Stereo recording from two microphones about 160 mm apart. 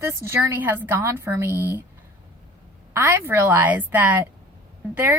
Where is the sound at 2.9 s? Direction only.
15° right (ahead or behind).